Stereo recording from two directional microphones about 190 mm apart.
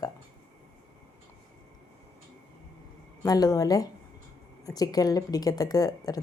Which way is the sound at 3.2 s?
20° left (ahead or behind).